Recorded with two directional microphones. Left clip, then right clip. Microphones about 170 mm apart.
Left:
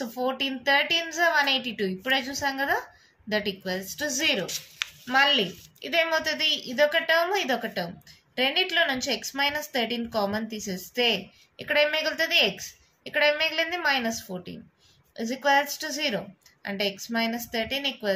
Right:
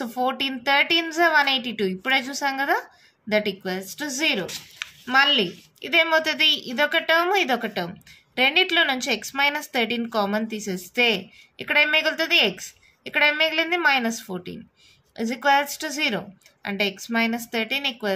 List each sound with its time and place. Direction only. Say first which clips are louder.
0.0 s a woman's voice: right 4 dB; 40° right (ahead or behind)